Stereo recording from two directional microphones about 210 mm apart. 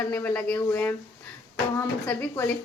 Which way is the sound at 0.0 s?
10° left (ahead or behind).